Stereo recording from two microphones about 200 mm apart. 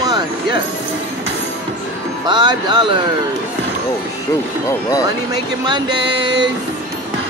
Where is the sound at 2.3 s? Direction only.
20° right (ahead or behind).